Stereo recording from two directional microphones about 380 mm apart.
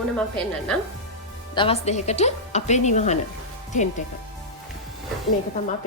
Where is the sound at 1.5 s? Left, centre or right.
Centre.